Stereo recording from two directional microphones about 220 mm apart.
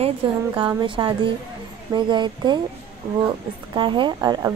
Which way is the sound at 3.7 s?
20° right (ahead or behind).